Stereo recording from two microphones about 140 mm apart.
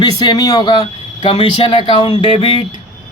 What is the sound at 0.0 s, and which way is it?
Speech, 30° left (ahead or behind).